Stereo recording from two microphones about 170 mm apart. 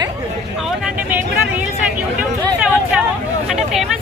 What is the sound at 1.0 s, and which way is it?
Speech, 10° right (ahead or behind).